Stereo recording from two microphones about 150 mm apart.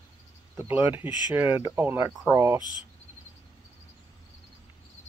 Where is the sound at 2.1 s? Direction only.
Centre (ahead or behind).